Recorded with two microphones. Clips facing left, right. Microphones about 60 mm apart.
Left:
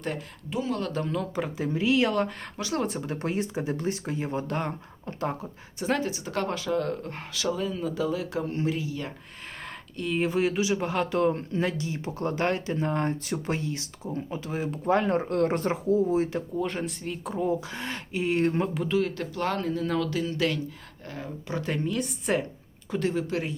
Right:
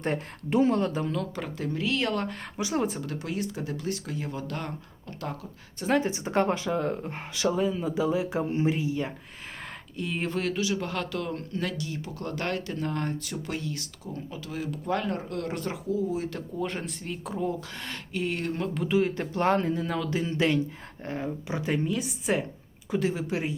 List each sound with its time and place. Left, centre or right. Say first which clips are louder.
1.1 s speech: left 2 dB; centre
2.6 s a woman's voice: right 1 dB; centre
3.2 s speech: left 5 dB; left
6.0 s speech: right 4 dB; right
10.0 s speech: left 4 dB; centre
10.3 s speech: left 3 dB; centre; by 16.3 s left
16.6 s speech: left 1 dB; centre
17.7 s speech: left 2 dB; centre
18.9 s speech: right 1 dB; centre
19.7 s a woman's voice: left 2 dB; centre
20.1 s a woman's voice: right 1 dB; right; by 23.6 s centre